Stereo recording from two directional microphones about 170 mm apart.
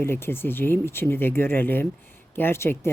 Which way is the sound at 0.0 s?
15° left (ahead or behind).